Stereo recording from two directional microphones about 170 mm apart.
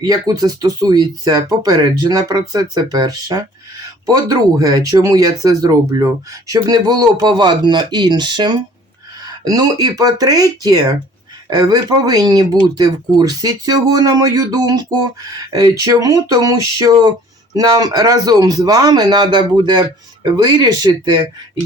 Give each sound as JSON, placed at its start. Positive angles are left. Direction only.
{"t": 0.0, "sound": "speech", "side_deg": -25}